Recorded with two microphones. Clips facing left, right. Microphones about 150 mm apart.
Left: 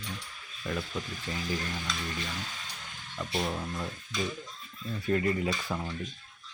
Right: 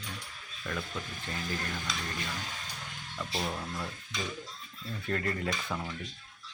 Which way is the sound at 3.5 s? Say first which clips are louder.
Left 2 dB; 15° left (ahead or behind).